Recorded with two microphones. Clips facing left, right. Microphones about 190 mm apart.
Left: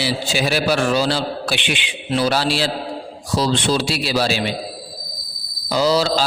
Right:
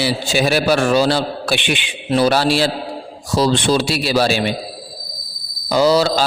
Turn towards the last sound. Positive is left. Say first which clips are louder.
# right 3 dB
turn(degrees=-55)  # may be behind; listen again after turning